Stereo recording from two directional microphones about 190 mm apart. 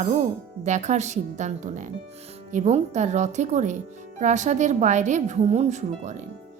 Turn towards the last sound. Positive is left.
turn(degrees=-40)  # may be behind; listen again after turning